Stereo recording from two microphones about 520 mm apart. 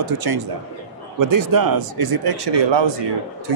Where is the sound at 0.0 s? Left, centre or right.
Right.